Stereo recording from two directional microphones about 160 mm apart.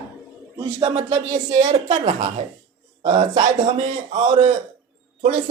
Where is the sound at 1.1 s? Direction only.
40° right (ahead or behind).